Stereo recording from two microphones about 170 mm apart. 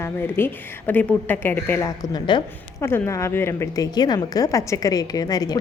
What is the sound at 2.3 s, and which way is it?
Speech, 25° left (ahead or behind).